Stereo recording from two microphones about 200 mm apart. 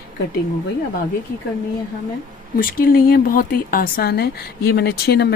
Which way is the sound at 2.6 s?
45° left (ahead or behind).